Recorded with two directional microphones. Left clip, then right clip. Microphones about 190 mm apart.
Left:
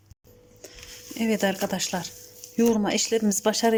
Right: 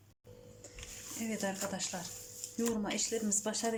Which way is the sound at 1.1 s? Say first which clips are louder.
Left 13 dB; 50° left (ahead or behind).